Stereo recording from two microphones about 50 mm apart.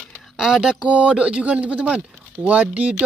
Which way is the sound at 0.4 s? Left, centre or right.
Centre.